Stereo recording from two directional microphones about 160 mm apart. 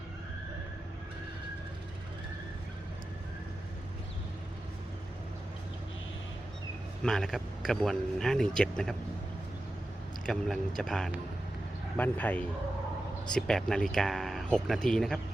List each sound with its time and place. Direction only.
7.0 s speech: 5° left (ahead or behind)
10.3 s speech: centre (ahead or behind)